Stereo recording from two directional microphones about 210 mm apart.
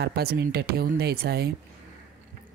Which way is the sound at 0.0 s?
50° right (ahead or behind).